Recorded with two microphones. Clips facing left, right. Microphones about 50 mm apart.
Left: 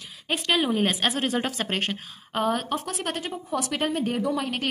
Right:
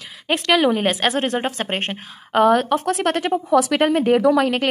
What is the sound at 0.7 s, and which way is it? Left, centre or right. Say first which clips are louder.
Speech: right 5 dB; right.